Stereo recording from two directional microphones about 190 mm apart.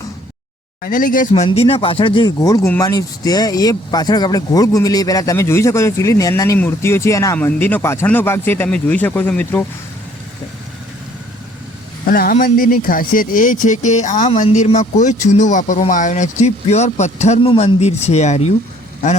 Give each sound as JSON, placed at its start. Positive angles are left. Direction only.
{"t": 0.8, "sound": "speech", "side_deg": 45}
{"t": 1.3, "sound": "speech", "side_deg": 30}
{"t": 12.0, "sound": "speech", "side_deg": 50}